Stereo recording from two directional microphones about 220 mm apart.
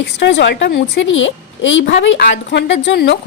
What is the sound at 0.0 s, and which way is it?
Speech, 50° left (ahead or behind).